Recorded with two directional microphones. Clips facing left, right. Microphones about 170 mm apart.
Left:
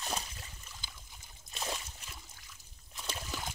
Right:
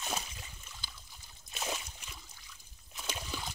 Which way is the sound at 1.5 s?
5° right (ahead or behind).